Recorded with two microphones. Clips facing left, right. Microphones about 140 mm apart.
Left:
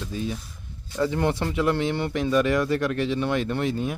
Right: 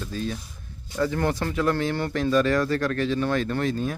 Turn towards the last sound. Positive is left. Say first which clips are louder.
# even
turn(degrees=20)  # may be behind; listen again after turning